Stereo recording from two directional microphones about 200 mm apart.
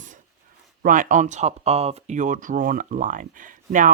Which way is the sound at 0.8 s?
40° right (ahead or behind).